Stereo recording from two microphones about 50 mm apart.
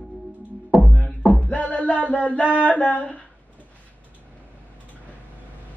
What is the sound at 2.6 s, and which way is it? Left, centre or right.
Speech, left.